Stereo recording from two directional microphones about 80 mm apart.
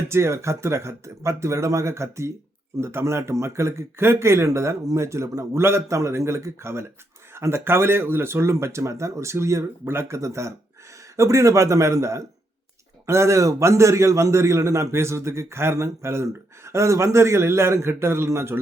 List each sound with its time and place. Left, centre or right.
0.1 s a man's voice: right